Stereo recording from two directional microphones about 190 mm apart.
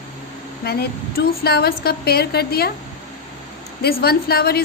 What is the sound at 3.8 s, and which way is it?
Speech, 55° left (ahead or behind).